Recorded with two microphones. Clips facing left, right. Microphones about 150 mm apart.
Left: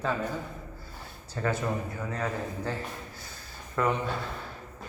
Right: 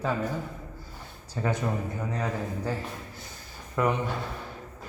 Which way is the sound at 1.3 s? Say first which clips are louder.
Right 1 dB; 15° right (ahead or behind).